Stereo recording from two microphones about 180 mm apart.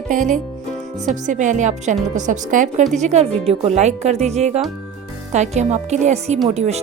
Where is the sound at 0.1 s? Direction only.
45° right (ahead or behind).